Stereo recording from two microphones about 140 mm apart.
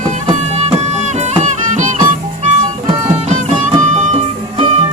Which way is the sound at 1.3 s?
55° right (ahead or behind).